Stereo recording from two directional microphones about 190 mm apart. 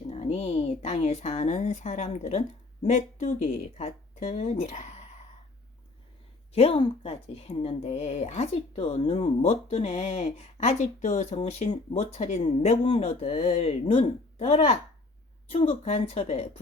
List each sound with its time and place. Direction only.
0.1 s a woman's voice: 35° left (ahead or behind)
6.5 s a woman's voice: 30° left (ahead or behind)